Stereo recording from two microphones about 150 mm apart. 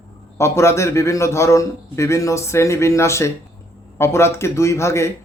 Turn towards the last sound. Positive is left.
turn(degrees=20)  # may be behind; listen again after turning